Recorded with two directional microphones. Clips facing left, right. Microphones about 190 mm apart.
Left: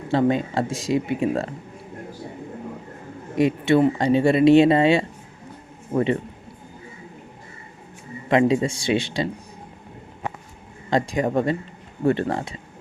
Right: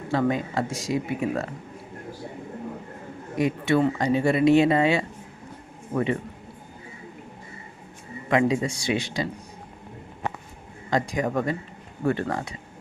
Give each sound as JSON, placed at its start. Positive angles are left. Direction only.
{"t": 0.1, "sound": "speech", "side_deg": 25}
{"t": 3.3, "sound": "speech", "side_deg": 25}
{"t": 8.3, "sound": "speech", "side_deg": 25}
{"t": 10.8, "sound": "speech", "side_deg": 25}